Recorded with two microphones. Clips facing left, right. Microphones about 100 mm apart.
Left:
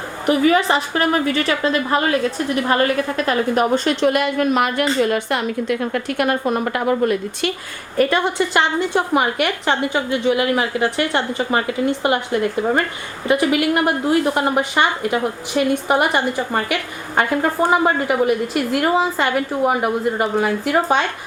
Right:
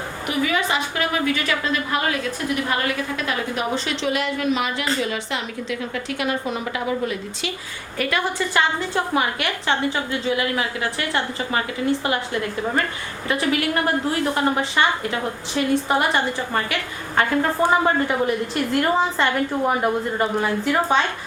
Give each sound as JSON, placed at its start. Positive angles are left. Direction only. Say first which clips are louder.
{"t": 0.3, "sound": "a woman's voice", "louder": "left 7 dB", "side_deg": 35}
{"t": 8.1, "sound": "a woman's voice", "louder": "left 4 dB", "side_deg": 20}
{"t": 13.2, "sound": "a woman's voice", "louder": "left 5 dB", "side_deg": 15}